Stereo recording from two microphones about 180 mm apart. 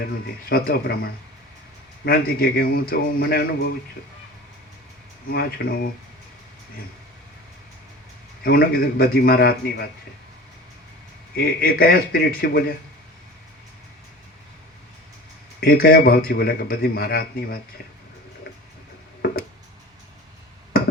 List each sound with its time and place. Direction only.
0.0 s a man's voice: 55° left (ahead or behind)
5.3 s a man's voice: 60° left (ahead or behind)
8.4 s a man's voice: 55° left (ahead or behind)
11.3 s a man's voice: 55° left (ahead or behind)
15.6 s a man's voice: 55° left (ahead or behind)